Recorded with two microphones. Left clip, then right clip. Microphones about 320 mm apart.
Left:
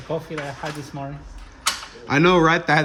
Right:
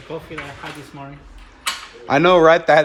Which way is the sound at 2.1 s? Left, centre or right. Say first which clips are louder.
Right 5 dB; centre.